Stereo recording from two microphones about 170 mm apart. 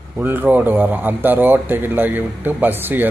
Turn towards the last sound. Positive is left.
turn(degrees=-10)  # may be behind; listen again after turning